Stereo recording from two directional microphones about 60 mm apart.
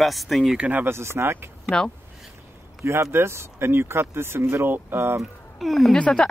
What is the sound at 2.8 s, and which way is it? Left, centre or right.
Speech, right.